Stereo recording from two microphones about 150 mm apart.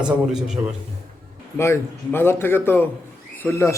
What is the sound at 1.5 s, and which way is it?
Speech, 15° left (ahead or behind).